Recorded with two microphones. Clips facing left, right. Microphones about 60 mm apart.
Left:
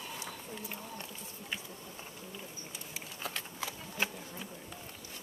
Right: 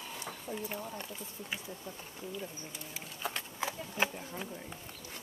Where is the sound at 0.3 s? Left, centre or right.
Centre.